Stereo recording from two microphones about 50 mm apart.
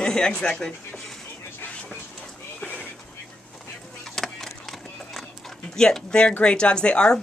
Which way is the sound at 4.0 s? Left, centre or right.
Centre.